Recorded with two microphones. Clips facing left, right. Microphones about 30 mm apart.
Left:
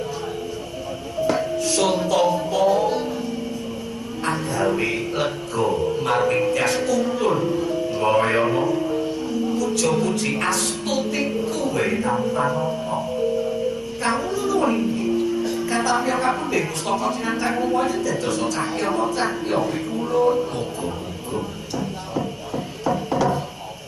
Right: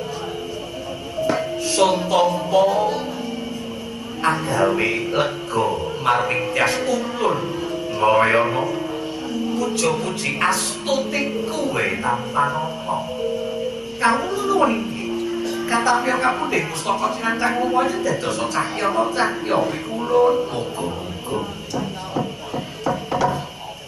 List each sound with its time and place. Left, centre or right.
1.2 s music: centre
2.0 s a woman's voice: centre
4.3 s a woman's voice: centre
14.0 s music: centre
15.7 s a woman's voice: centre
22.8 s music: centre